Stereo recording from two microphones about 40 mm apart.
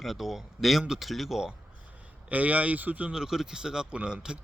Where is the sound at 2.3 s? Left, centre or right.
Right.